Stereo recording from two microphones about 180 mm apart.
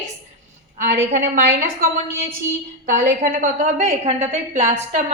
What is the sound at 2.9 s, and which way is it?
A woman's voice, 50° right (ahead or behind).